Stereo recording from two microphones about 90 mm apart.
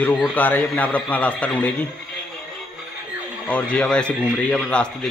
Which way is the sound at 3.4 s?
15° left (ahead or behind).